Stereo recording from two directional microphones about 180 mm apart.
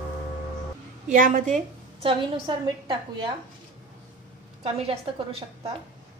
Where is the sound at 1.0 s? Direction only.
45° right (ahead or behind).